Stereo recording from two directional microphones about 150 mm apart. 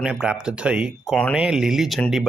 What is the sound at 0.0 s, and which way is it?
Speech, 5° right (ahead or behind).